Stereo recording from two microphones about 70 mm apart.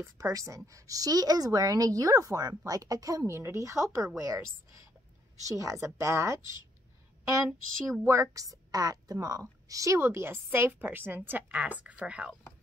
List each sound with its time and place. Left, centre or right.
0.2 s a woman's voice: right
3.3 s a woman's voice: right
9.9 s a woman's voice: right; by 12.3 s centre